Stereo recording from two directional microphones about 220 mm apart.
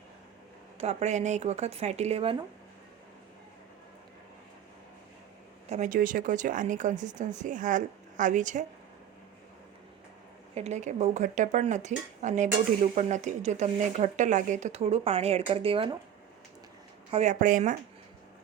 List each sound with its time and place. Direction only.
0.8 s speech: 30° right (ahead or behind)
5.6 s speech: 30° right (ahead or behind)
10.5 s speech: 30° right (ahead or behind)
17.1 s speech: 30° right (ahead or behind)